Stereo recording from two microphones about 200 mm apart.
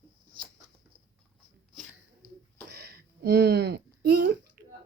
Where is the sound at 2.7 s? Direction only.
50° right (ahead or behind).